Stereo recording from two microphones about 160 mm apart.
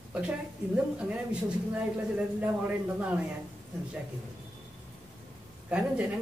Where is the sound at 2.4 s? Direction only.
10° right (ahead or behind).